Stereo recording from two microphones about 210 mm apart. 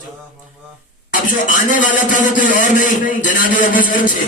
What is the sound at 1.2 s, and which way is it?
A man's voice, 40° left (ahead or behind).